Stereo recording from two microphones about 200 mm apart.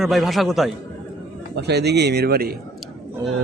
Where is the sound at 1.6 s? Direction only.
55° right (ahead or behind).